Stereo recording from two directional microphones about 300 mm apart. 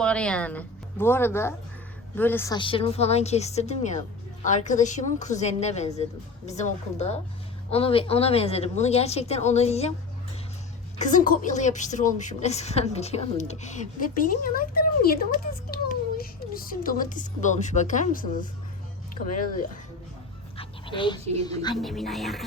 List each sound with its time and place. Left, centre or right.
0.0 s a child's voice: centre; by 9.9 s left
10.9 s a child's voice: left
20.6 s dog: centre
21.4 s speech: centre
21.8 s speech: centre